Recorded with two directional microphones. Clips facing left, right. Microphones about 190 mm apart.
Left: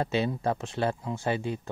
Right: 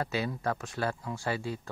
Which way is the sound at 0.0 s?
25° left (ahead or behind).